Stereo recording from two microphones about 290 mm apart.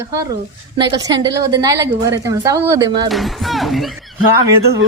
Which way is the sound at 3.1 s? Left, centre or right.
Centre.